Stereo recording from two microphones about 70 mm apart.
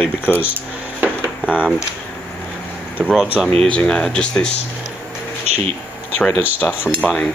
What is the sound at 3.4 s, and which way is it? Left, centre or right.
Speech, centre.